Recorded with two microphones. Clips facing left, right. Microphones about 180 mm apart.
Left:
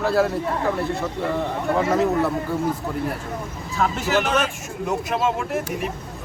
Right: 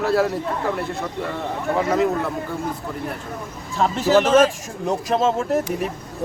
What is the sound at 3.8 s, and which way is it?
Speech, 30° right (ahead or behind).